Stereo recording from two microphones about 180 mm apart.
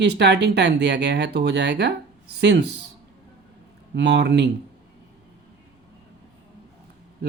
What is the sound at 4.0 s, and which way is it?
Speech, 75° right (ahead or behind).